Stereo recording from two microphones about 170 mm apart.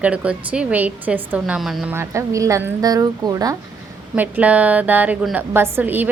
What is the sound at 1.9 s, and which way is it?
Speech, 15° right (ahead or behind).